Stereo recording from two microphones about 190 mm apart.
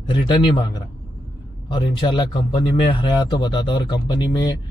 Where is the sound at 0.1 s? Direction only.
25° left (ahead or behind).